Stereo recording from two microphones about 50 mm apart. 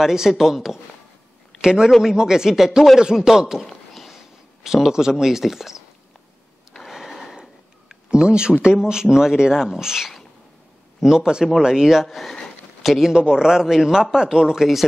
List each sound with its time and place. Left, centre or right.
0.0 s speech: centre
3.6 s a sound: centre
4.6 s speech: centre
6.7 s a sound: centre
8.1 s speech: centre
13.1 s speech: centre